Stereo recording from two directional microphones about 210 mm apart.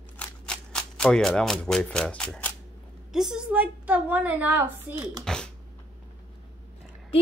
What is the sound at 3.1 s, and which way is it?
A woman's voice, centre (ahead or behind).